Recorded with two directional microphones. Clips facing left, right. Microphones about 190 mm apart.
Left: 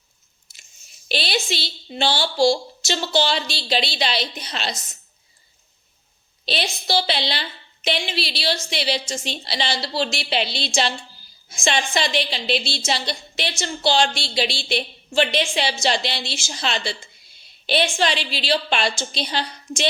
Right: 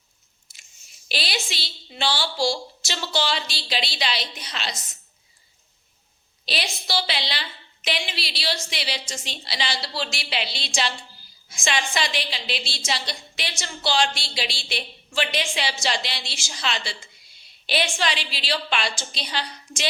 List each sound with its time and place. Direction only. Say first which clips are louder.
1.0 s a sound: left 6 dB; 25° left (ahead or behind)
2.0 s a woman's voice: left 5 dB; 25° left (ahead or behind)
6.4 s a woman's voice: left 4 dB; 25° left (ahead or behind)